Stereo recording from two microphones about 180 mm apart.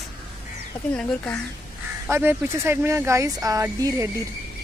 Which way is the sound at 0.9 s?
10° left (ahead or behind).